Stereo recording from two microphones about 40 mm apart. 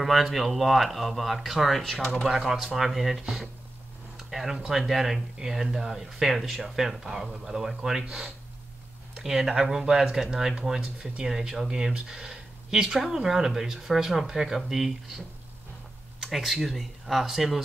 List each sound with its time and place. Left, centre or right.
0.0 s speech: centre
2.3 s speech: centre
2.6 s speech: centre